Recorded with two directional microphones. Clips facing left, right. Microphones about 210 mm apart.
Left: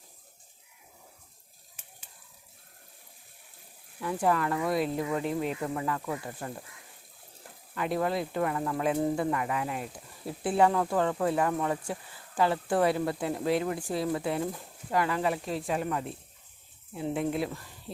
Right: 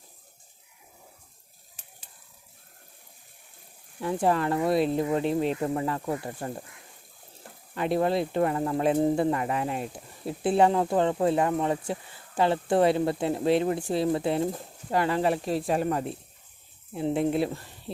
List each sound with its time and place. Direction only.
1.8 s a sound: 35° right (ahead or behind)
4.0 s speech: 25° right (ahead or behind)
7.8 s speech: 25° right (ahead or behind)
16.9 s speech: 30° right (ahead or behind)